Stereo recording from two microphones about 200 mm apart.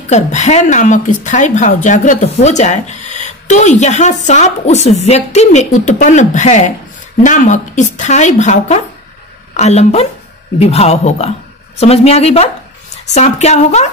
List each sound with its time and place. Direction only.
0.1 s a woman's voice: 35° left (ahead or behind)